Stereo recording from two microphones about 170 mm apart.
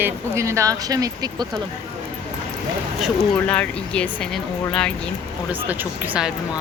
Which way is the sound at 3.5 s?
5° left (ahead or behind).